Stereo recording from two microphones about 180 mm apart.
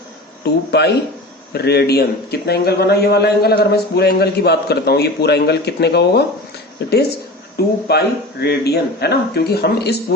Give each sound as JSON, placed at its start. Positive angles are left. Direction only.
{"t": 0.4, "sound": "a man's voice", "side_deg": 65}
{"t": 7.5, "sound": "a man's voice", "side_deg": 65}